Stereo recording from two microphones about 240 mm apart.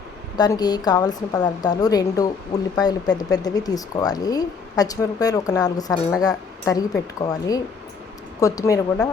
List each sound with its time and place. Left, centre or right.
0.3 s speech: centre